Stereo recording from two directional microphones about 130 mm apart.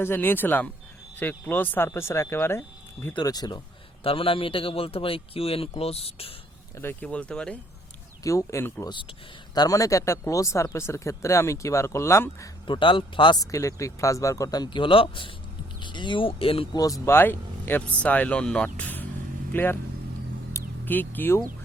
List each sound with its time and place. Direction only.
0.0 s speech: 15° left (ahead or behind)
3.2 s speech: 30° left (ahead or behind)
4.0 s speech: 45° left (ahead or behind)
6.7 s speech: 15° left (ahead or behind)
8.2 s speech: 25° left (ahead or behind)
12.6 s speech: 40° left (ahead or behind)
13.5 s speech: 25° left (ahead or behind); by 16.6 s 45° left (ahead or behind)
16.7 s speech: 25° left (ahead or behind)
17.2 s speech: 15° left (ahead or behind)
20.8 s speech: 15° left (ahead or behind)